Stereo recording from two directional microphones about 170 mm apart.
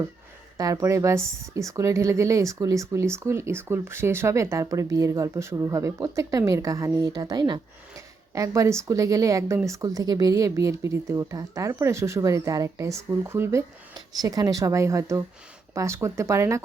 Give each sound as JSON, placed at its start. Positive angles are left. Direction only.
{"t": 0.5, "sound": "speech", "side_deg": -20}